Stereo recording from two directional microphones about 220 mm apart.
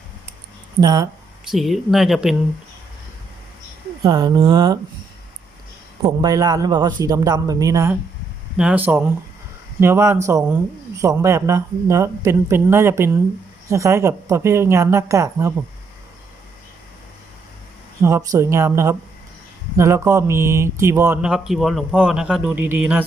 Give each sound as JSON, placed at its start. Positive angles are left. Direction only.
{"t": 0.8, "sound": "speech", "side_deg": -20}
{"t": 1.5, "sound": "speech", "side_deg": 0}
{"t": 4.0, "sound": "speech", "side_deg": -20}
{"t": 6.0, "sound": "speech", "side_deg": -15}
{"t": 18.0, "sound": "speech", "side_deg": -15}